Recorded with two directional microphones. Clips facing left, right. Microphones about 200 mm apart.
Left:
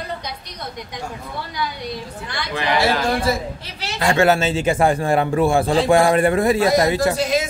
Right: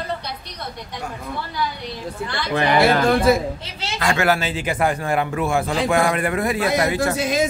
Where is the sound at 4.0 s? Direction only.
25° left (ahead or behind).